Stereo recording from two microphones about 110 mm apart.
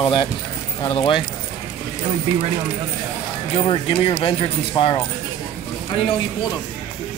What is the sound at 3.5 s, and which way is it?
Speech, 55° left (ahead or behind).